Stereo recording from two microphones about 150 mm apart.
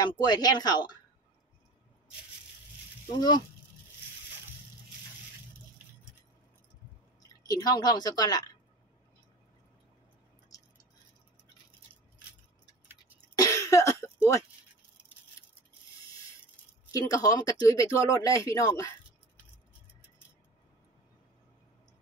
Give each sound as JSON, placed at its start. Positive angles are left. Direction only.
{"t": 0.0, "sound": "a woman's voice", "side_deg": 30}
{"t": 3.2, "sound": "a woman's voice", "side_deg": 30}
{"t": 7.4, "sound": "a woman's voice", "side_deg": 25}
{"t": 10.5, "sound": "a sound", "side_deg": 25}
{"t": 13.4, "sound": "cough", "side_deg": 20}
{"t": 17.1, "sound": "a woman's voice", "side_deg": 25}